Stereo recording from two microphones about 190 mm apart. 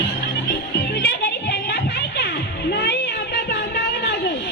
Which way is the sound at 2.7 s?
60° left (ahead or behind).